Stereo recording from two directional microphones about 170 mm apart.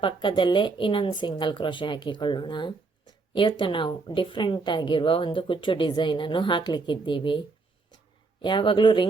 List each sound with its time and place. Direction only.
0.0 s a woman's voice: 30° left (ahead or behind)